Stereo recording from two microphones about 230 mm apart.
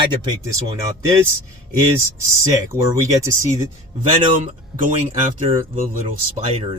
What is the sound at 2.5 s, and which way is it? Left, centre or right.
Speech, centre.